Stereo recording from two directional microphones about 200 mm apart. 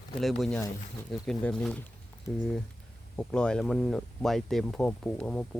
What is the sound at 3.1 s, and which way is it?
Speech, 5° left (ahead or behind).